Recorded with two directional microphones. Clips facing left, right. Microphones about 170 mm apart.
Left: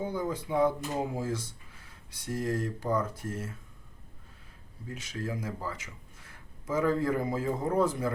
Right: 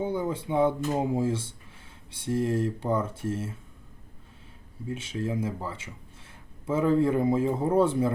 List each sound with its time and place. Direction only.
0.0 s speech: 25° right (ahead or behind)
4.9 s speech: 25° right (ahead or behind)